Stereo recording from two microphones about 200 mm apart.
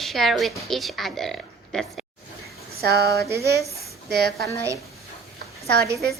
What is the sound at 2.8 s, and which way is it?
Speech, 55° right (ahead or behind).